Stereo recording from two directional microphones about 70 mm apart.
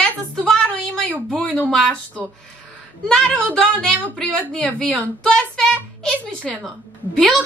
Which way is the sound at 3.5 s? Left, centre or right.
Centre.